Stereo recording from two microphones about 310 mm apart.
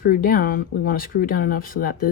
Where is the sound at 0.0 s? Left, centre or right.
Left.